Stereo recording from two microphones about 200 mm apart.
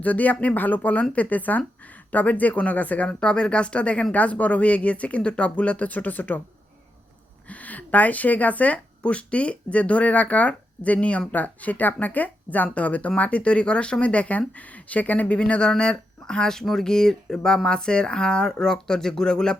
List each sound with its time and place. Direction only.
0.0 s speech: 10° left (ahead or behind)
7.4 s speech: 5° left (ahead or behind)